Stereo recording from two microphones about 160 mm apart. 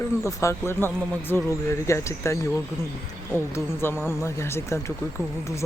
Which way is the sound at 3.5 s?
15° left (ahead or behind).